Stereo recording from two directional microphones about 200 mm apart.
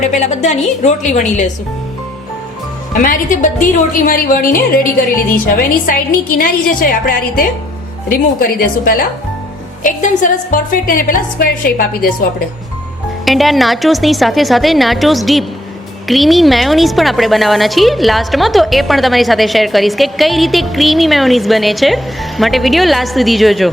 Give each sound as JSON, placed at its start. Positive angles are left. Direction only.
{"t": 0.1, "sound": "a woman's voice", "side_deg": 35}
{"t": 2.9, "sound": "a woman's voice", "side_deg": 40}
{"t": 13.2, "sound": "a woman's voice", "side_deg": 0}